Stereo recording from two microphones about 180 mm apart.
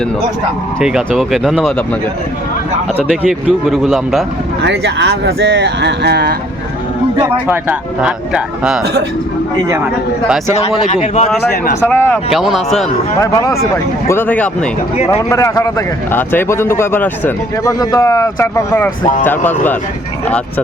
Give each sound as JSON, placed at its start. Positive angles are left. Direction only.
{"t": 0.8, "sound": "speech", "side_deg": 0}
{"t": 3.0, "sound": "speech", "side_deg": 0}
{"t": 4.6, "sound": "speech", "side_deg": -75}
{"t": 7.4, "sound": "speech", "side_deg": -10}
{"t": 10.5, "sound": "a man's voice", "side_deg": 40}
{"t": 11.9, "sound": "speech", "side_deg": 10}
{"t": 12.3, "sound": "speech", "side_deg": 0}
{"t": 13.1, "sound": "speech", "side_deg": 20}